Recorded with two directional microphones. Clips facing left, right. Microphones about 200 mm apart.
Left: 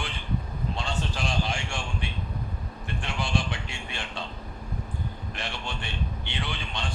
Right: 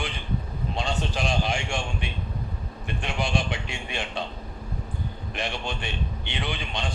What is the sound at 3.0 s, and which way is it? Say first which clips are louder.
A man's voice: right 2 dB; 20° right (ahead or behind).